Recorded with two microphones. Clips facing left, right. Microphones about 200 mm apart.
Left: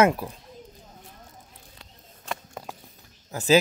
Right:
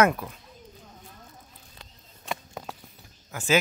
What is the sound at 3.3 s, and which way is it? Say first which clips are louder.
Speech: left 5 dB; 35° left (ahead or behind).